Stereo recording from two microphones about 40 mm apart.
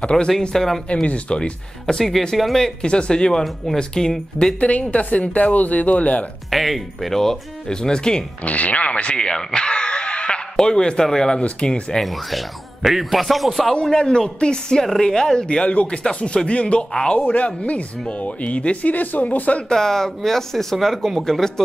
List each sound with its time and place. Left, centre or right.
0.4 s speech: centre
1.0 s speech: left
2.3 s speech: centre
2.8 s speech: left
4.6 s speech: left
6.5 s speech: centre
8.5 s speech: left; by 11.4 s centre
11.4 s speech: left
12.0 s speech: centre
13.9 s speech: centre
15.4 s speech: left
19.7 s speech: centre